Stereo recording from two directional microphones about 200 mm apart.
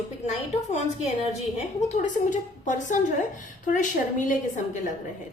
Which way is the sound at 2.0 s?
40° left (ahead or behind).